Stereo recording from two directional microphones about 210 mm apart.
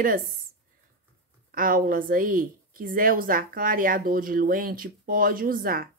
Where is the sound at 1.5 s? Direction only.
40° right (ahead or behind).